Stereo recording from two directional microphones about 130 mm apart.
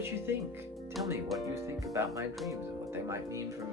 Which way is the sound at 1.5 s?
25° right (ahead or behind).